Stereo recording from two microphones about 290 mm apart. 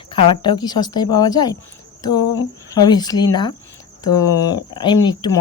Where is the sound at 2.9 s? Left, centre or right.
Centre.